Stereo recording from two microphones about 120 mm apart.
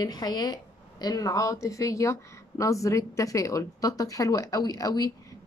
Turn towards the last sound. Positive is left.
turn(degrees=30)  # may be behind; listen again after turning